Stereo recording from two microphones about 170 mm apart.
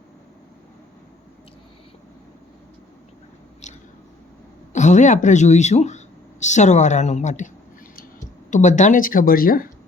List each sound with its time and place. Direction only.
3.6 s chewing: 45° left (ahead or behind)
4.7 s speech: 45° left (ahead or behind)